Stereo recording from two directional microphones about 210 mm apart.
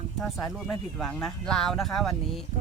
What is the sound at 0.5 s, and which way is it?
Speech, centre (ahead or behind).